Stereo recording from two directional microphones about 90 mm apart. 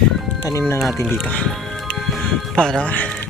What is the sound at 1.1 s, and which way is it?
Speech, 15° left (ahead or behind).